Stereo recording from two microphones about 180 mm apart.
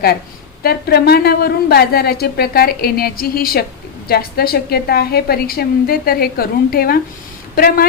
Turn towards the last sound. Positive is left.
turn(degrees=55)  # may be behind; listen again after turning